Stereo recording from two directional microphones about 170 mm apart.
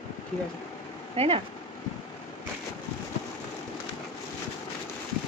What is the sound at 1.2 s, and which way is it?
Speech, 35° right (ahead or behind).